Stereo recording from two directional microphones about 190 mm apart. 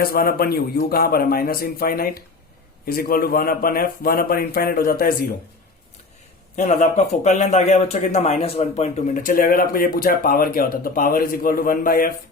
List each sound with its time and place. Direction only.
0.0 s speech: 50° left (ahead or behind)
6.6 s speech: 40° left (ahead or behind)